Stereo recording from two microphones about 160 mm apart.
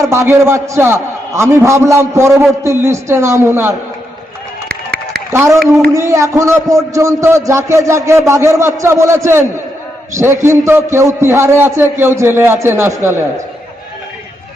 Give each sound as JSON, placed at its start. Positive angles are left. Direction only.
{"t": 0.1, "sound": "a man's voice", "side_deg": -15}
{"t": 4.7, "sound": "run", "side_deg": -75}
{"t": 5.3, "sound": "a man's voice", "side_deg": -15}